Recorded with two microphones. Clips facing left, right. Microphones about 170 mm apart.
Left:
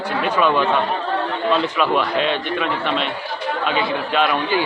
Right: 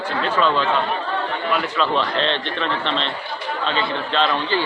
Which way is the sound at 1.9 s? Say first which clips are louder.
Left 2 dB; 10° left (ahead or behind).